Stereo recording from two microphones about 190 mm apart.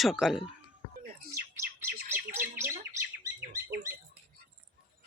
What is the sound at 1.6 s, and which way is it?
Bird, 10° right (ahead or behind).